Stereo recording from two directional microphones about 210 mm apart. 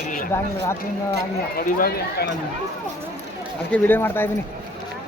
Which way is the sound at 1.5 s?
45° left (ahead or behind).